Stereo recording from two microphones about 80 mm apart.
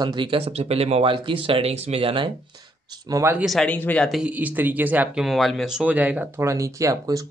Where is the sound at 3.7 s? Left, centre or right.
Centre.